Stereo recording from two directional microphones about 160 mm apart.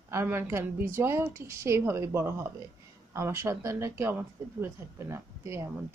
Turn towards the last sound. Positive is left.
turn(degrees=-15)  # may be behind; listen again after turning